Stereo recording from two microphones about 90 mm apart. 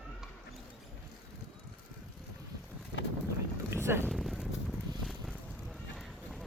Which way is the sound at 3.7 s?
30° right (ahead or behind).